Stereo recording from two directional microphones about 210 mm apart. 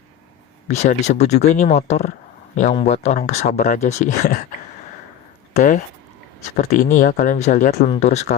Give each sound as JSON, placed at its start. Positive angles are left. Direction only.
{"t": 0.7, "sound": "speech", "side_deg": 35}
{"t": 5.5, "sound": "speech", "side_deg": 40}